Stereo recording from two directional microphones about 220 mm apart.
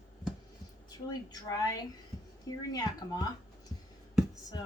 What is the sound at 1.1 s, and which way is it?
A woman's voice, 15° left (ahead or behind).